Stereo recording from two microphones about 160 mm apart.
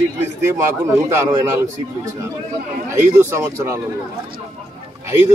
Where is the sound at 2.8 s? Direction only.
15° right (ahead or behind).